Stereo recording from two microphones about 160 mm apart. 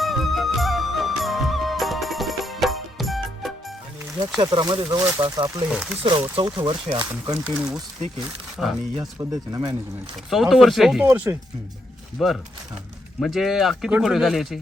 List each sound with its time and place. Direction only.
0.0 s music: centre (ahead or behind)
4.4 s speech: 25° right (ahead or behind)
5.7 s speech: 5° right (ahead or behind)
6.0 s speech: 35° right (ahead or behind)
7.4 s speech: 5° right (ahead or behind)
9.0 s speech: 20° right (ahead or behind)
10.2 s speech: centre (ahead or behind)
12.2 s speech: centre (ahead or behind)